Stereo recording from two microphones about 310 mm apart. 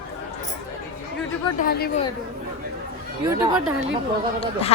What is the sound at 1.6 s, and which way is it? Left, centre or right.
Speech, left.